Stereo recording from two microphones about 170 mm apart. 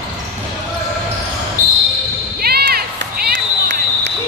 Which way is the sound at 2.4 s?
65° right (ahead or behind).